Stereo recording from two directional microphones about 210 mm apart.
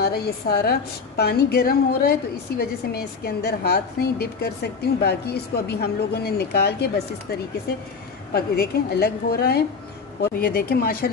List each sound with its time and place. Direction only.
0.0 s a woman's voice: 50° left (ahead or behind)
8.3 s a woman's voice: 50° left (ahead or behind)